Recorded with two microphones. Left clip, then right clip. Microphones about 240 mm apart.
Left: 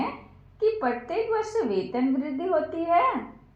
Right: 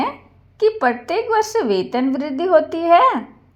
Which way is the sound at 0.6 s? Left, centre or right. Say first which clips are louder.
Right 8 dB; right.